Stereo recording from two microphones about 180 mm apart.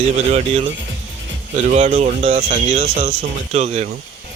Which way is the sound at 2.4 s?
55° right (ahead or behind).